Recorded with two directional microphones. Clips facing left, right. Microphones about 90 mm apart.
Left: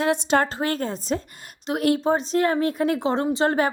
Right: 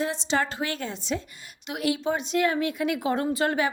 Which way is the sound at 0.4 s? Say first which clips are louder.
Left 5 dB; 40° left (ahead or behind).